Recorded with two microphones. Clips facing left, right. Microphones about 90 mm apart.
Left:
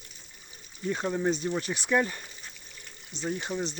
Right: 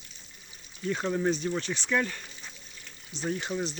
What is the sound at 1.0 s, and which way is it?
Speech, 5° left (ahead or behind).